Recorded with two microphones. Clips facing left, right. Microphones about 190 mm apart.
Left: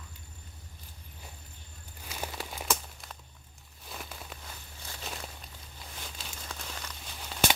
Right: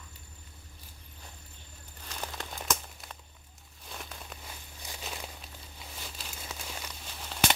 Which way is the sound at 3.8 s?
Centre (ahead or behind).